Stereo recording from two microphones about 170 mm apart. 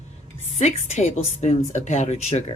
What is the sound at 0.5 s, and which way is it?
Speech, 40° left (ahead or behind).